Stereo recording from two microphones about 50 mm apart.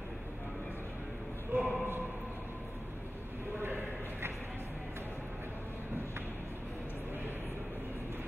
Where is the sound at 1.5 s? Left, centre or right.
Right.